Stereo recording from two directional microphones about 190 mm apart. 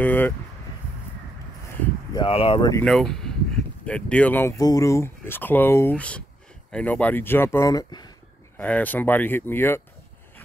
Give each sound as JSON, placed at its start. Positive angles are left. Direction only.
{"t": 0.0, "sound": "speech", "side_deg": 10}
{"t": 2.1, "sound": "speech", "side_deg": 30}
{"t": 2.8, "sound": "speech", "side_deg": 0}
{"t": 8.5, "sound": "speech", "side_deg": 10}